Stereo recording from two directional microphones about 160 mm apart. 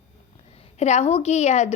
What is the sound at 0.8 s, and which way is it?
Speech, 45° left (ahead or behind).